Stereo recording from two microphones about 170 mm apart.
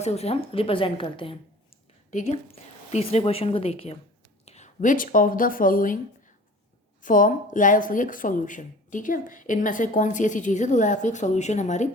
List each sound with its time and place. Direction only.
0.0 s a woman's voice: 40° left (ahead or behind)
2.0 s a woman's voice: 45° left (ahead or behind)
7.0 s speech: 50° left (ahead or behind)